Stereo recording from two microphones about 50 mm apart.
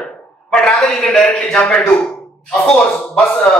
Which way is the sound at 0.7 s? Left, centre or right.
Centre.